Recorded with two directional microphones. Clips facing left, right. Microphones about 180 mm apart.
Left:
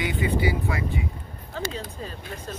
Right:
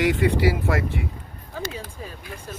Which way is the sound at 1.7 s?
10° right (ahead or behind).